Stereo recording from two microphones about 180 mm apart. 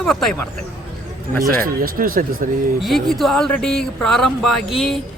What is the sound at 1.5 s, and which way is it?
Speech, 50° right (ahead or behind).